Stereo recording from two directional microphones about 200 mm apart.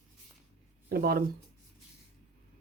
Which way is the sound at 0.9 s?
50° right (ahead or behind).